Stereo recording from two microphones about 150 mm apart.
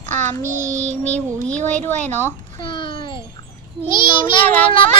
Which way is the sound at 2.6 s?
35° left (ahead or behind).